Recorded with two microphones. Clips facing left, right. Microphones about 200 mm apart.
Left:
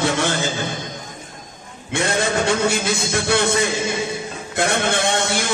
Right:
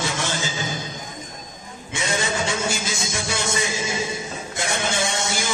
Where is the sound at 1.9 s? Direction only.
60° left (ahead or behind).